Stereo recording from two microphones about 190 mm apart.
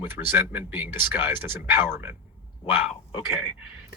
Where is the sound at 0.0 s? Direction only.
10° right (ahead or behind).